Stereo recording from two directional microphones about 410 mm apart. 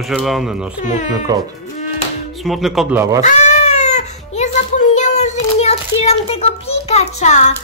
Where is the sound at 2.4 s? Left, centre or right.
Centre.